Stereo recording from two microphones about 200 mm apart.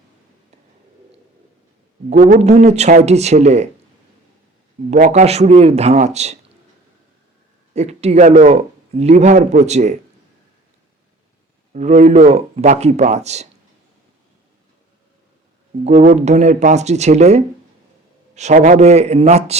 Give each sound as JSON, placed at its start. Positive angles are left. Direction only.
{"t": 2.0, "sound": "speech", "side_deg": -35}
{"t": 4.9, "sound": "speech", "side_deg": -40}
{"t": 7.7, "sound": "speech", "side_deg": -35}
{"t": 11.7, "sound": "speech", "side_deg": -40}
{"t": 15.8, "sound": "speech", "side_deg": -35}